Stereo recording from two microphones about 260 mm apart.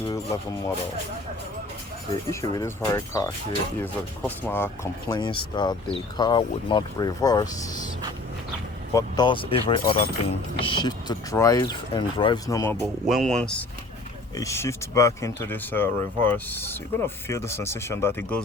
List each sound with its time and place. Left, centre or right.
0.1 s speech: centre
2.3 s speech: centre
8.9 s speech: centre
12.8 s speech: centre